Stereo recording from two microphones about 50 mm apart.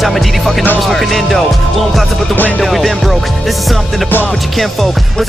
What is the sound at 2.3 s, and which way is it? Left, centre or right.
Speech, left.